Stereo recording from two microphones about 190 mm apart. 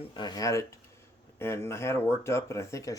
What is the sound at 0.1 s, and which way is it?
Speech, 20° left (ahead or behind).